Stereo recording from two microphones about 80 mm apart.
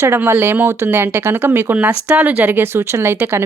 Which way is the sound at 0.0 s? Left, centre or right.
Right.